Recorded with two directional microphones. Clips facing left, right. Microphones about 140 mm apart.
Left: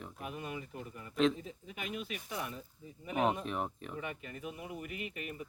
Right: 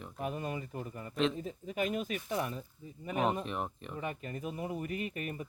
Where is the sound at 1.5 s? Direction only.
40° right (ahead or behind).